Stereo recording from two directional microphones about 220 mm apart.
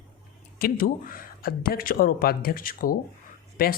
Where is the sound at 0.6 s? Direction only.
40° left (ahead or behind).